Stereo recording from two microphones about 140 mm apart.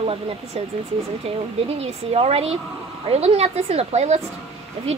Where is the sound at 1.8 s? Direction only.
45° right (ahead or behind).